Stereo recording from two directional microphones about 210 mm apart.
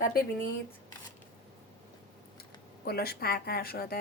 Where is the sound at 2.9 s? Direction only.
50° left (ahead or behind).